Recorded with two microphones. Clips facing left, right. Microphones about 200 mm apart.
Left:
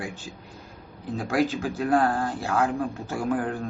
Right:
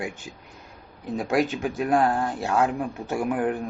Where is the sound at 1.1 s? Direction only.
20° right (ahead or behind).